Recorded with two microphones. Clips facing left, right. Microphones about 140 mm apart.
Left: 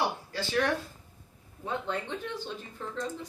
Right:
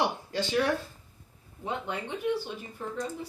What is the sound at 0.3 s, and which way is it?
Speech, 15° right (ahead or behind).